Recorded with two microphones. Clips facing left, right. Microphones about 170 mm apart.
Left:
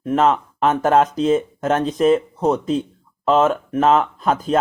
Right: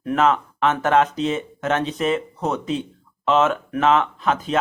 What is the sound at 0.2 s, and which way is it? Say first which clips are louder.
Speech: left 1 dB; 35° left (ahead or behind).